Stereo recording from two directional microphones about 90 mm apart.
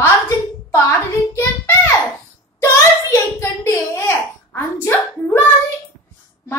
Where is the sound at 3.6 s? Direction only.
35° left (ahead or behind).